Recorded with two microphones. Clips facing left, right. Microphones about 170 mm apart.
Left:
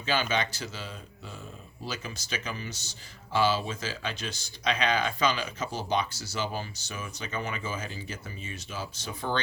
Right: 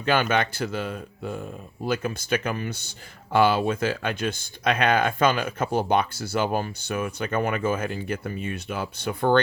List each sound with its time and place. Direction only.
0.0 s speech: 55° right (ahead or behind)